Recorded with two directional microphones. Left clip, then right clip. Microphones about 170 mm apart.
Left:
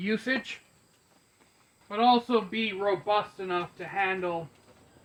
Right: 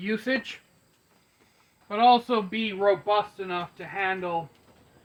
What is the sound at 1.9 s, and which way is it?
Speech, 90° right.